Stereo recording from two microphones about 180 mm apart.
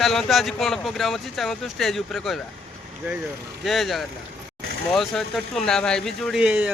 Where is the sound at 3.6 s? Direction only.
Centre (ahead or behind).